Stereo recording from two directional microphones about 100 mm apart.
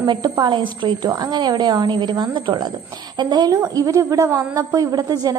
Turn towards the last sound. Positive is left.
turn(degrees=-40)  # may be behind; listen again after turning